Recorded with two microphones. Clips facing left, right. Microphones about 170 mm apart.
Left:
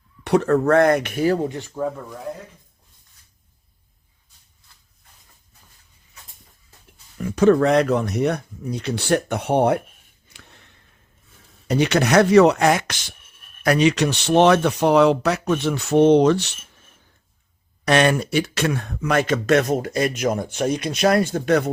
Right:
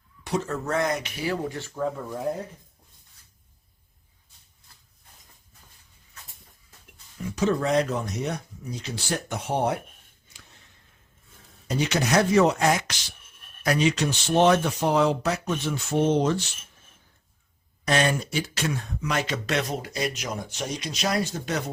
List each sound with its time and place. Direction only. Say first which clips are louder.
0.3 s speech: left 11 dB; 65° left (ahead or behind); by 1.4 s 50° left (ahead or behind)
1.4 s speech: left 4 dB; 20° left (ahead or behind)
2.0 s speech: right 2 dB; 10° right (ahead or behind)
7.3 s speech: left 9 dB; 60° left (ahead or behind)
10.3 s a sound: left 5 dB; 65° left (ahead or behind)
11.7 s speech: left 6 dB; 65° left (ahead or behind)
17.8 s speech: left 6 dB; 70° left (ahead or behind)